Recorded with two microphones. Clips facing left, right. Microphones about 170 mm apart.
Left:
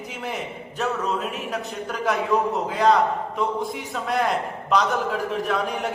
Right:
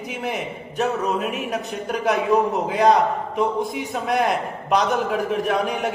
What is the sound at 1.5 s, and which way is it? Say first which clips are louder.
A man's voice: right 3 dB; 20° right (ahead or behind).